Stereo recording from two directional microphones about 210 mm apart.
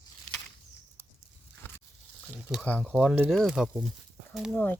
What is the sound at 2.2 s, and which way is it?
Speech, centre (ahead or behind).